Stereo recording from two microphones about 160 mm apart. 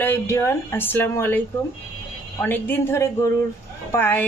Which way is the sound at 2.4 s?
10° left (ahead or behind).